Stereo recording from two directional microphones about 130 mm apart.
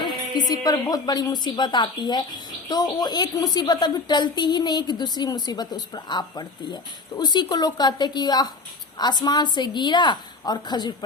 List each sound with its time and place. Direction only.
0.0 s speech: 30° left (ahead or behind)